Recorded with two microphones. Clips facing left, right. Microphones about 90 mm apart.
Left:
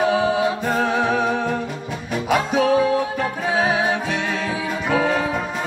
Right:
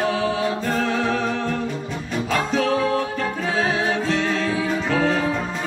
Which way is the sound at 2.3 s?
15° left (ahead or behind).